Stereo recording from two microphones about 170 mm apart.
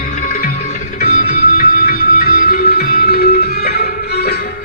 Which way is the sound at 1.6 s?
55° left (ahead or behind).